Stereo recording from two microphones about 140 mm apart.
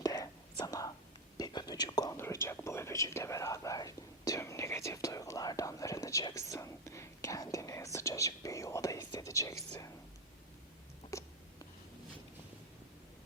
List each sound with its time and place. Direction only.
0.0 s whispering: 25° left (ahead or behind)
2.1 s whispering: 15° left (ahead or behind)
11.1 s a sound: 20° left (ahead or behind)